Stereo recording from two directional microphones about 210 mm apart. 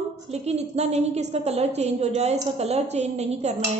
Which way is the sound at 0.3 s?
30° right (ahead or behind).